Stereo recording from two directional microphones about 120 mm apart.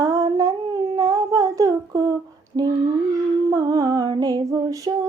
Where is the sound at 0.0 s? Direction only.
30° right (ahead or behind).